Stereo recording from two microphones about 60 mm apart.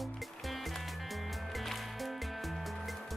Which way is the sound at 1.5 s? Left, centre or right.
Centre.